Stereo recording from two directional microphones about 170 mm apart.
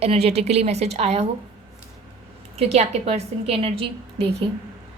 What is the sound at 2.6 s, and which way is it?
A woman's voice, 35° right (ahead or behind).